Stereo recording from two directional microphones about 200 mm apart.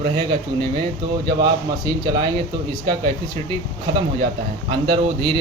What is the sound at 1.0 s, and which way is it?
Speech, 20° right (ahead or behind).